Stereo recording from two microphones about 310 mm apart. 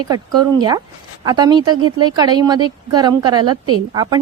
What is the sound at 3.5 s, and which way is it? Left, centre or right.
Speech, right.